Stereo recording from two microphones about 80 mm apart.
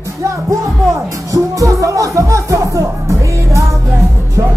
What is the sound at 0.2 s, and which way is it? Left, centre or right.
Speech, right.